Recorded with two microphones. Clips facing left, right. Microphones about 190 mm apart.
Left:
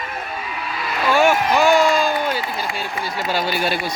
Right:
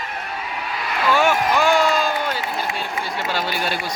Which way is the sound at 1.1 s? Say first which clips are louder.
Left 2 dB; 10° left (ahead or behind).